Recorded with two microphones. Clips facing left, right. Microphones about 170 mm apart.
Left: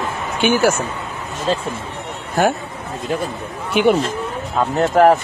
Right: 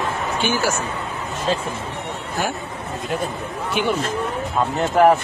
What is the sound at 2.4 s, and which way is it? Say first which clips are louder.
Speech: left 9 dB; 50° left (ahead or behind).